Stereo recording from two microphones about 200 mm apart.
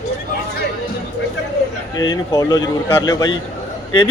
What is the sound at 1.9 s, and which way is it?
Speech, 20° left (ahead or behind).